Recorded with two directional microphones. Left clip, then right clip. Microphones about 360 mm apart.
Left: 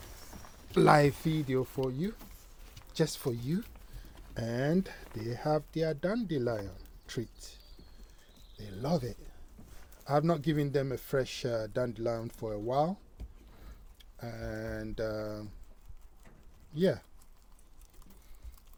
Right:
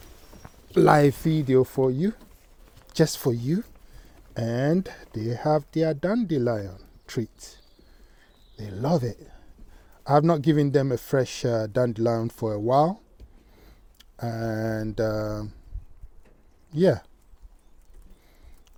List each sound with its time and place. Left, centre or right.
0.7 s speech: right
1.3 s a man's voice: right
14.0 s a man's voice: right
16.7 s a man's voice: right